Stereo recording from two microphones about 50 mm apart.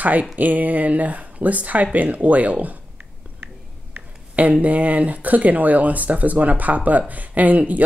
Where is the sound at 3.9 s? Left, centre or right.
Right.